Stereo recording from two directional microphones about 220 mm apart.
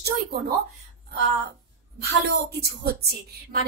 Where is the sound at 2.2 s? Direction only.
45° right (ahead or behind).